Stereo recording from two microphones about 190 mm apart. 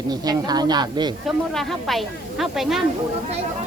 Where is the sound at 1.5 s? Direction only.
Centre (ahead or behind).